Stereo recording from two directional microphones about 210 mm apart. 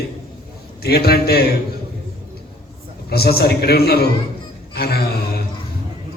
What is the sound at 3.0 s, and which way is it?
A man's voice, 50° left (ahead or behind).